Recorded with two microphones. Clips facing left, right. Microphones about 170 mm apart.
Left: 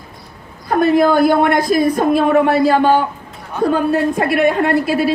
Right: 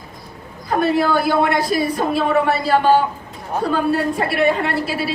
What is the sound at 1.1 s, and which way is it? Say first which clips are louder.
A woman's voice: left 5 dB; 50° left (ahead or behind).